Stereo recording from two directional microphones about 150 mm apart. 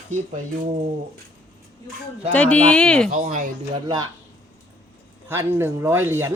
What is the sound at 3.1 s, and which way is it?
Speech, 55° right (ahead or behind).